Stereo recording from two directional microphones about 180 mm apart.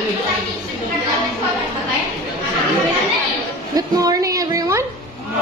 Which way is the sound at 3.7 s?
20° right (ahead or behind).